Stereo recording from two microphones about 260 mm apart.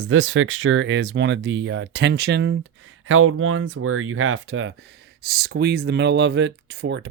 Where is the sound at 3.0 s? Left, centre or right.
Right.